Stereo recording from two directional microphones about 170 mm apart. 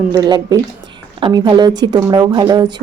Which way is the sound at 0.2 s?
25° right (ahead or behind).